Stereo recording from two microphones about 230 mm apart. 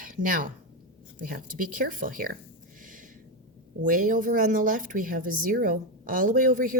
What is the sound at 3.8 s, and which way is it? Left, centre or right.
A woman's voice, right.